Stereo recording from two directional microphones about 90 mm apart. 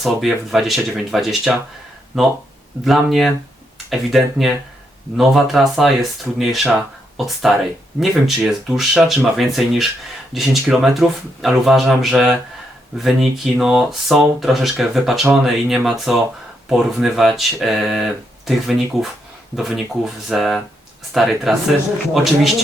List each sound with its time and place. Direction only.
0.0 s speech: centre (ahead or behind)